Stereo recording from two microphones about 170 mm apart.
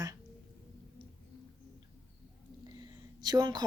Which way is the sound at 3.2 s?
25° right (ahead or behind).